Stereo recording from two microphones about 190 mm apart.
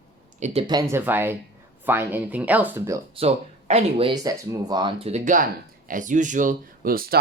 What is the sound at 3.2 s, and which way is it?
Speech, 35° right (ahead or behind).